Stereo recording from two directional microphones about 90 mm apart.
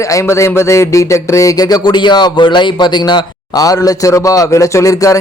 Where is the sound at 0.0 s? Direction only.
35° left (ahead or behind).